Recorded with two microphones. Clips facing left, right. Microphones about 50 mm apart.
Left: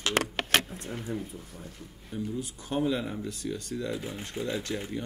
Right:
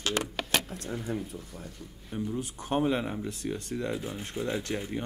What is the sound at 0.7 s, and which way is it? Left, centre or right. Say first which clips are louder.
Speech: right 2 dB; centre.